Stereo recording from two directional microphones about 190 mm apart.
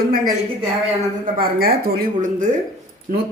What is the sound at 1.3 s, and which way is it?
A woman's voice, 50° right (ahead or behind).